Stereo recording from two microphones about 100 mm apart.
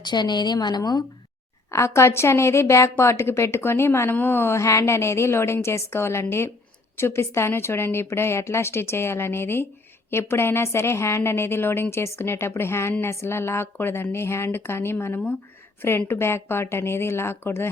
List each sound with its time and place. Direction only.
0.0 s a woman's voice: 45° left (ahead or behind)
1.7 s a woman's voice: 30° left (ahead or behind)